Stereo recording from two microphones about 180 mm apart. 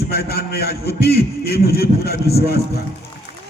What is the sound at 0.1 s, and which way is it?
A man's voice, 60° left (ahead or behind).